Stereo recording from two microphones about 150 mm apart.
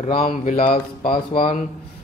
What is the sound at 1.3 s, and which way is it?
Speech, 40° left (ahead or behind).